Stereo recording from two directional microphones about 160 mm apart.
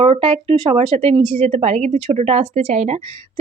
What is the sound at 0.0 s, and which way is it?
Speech, 35° right (ahead or behind).